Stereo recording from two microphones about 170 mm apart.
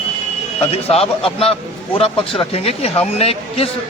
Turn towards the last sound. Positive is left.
turn(degrees=35)  # may be behind; listen again after turning